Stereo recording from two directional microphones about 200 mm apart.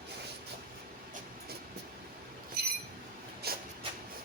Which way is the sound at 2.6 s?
50° right (ahead or behind).